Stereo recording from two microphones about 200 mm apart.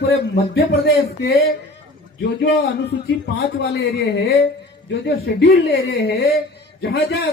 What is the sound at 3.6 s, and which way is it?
A man's voice, 55° left (ahead or behind).